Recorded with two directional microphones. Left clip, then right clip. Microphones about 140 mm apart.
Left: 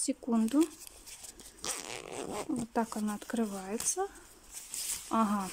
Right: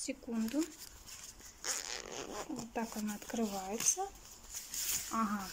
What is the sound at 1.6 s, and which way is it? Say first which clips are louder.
Dog: left 1 dB; 25° left (ahead or behind).